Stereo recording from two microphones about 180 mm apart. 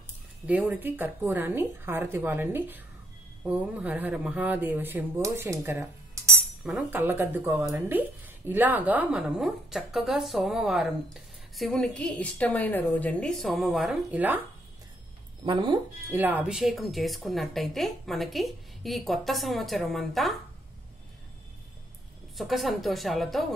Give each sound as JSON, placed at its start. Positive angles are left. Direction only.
{"t": 0.5, "sound": "speech", "side_deg": -5}
{"t": 15.4, "sound": "speech", "side_deg": -25}
{"t": 16.2, "sound": "speech", "side_deg": -10}
{"t": 22.4, "sound": "speech", "side_deg": 0}